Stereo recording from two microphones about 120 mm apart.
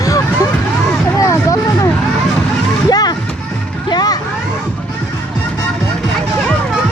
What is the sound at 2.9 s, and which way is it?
Music, 35° left (ahead or behind).